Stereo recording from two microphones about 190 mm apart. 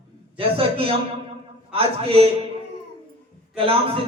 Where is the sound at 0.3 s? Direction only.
30° right (ahead or behind).